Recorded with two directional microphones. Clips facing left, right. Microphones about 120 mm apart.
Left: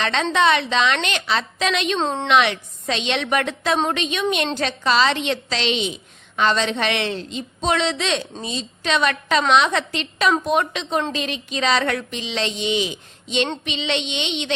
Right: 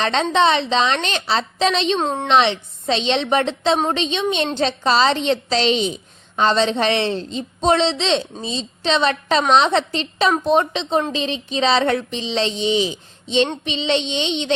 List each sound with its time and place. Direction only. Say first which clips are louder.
0.0 s a woman's voice: right 2 dB; 30° right (ahead or behind)
2.0 s a woman's voice: right 1 dB; 10° right (ahead or behind)
2.2 s a woman's voice: right 2 dB; 30° right (ahead or behind)